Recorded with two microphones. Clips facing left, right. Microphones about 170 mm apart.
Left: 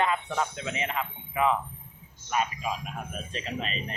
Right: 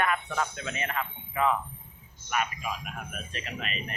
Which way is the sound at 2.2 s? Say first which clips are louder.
Left 2 dB; 30° left (ahead or behind).